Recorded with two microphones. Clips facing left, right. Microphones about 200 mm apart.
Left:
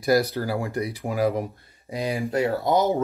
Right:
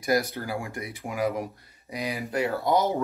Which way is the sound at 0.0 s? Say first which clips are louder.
Left 5 dB; 35° left (ahead or behind).